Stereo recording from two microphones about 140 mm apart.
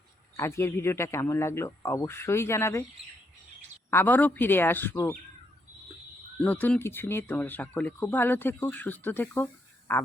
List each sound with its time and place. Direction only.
0.3 s speech: 20° left (ahead or behind)
3.9 s speech: 15° left (ahead or behind)
6.4 s speech: 10° left (ahead or behind)